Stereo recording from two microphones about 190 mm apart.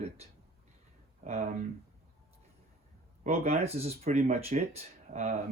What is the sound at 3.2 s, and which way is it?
Speech, 35° right (ahead or behind).